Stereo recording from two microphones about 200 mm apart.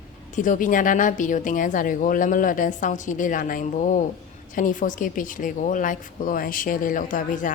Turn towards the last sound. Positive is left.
turn(degrees=40)  # may be behind; listen again after turning